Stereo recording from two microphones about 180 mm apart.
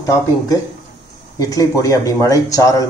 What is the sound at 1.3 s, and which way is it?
Speech, 20° left (ahead or behind).